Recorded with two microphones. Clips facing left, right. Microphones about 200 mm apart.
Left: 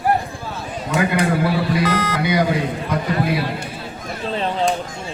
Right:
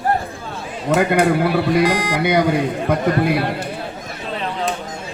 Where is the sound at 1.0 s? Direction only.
55° right (ahead or behind).